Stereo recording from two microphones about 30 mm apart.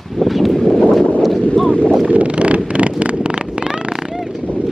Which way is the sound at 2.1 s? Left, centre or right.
Right.